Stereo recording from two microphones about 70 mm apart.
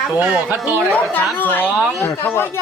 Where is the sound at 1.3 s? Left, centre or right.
Left.